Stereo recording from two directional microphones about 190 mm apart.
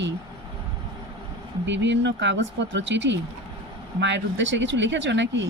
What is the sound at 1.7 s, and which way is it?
Speech, 70° right (ahead or behind).